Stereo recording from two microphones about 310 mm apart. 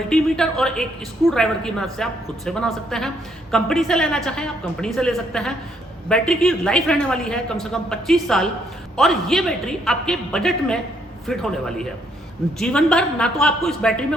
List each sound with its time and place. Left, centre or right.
0.1 s a woman's voice: centre